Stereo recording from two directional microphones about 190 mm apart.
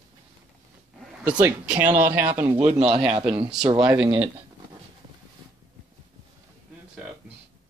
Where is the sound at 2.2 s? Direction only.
30° right (ahead or behind).